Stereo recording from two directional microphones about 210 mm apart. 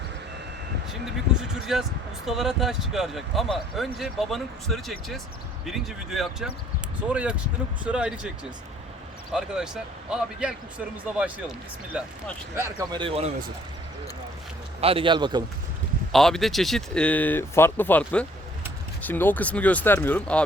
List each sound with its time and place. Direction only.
1.0 s speech: centre (ahead or behind)
10.1 s speech: 5° right (ahead or behind)
12.9 s a man's voice: 25° right (ahead or behind)
14.8 s a man's voice: 25° right (ahead or behind)
16.1 s speech: centre (ahead or behind)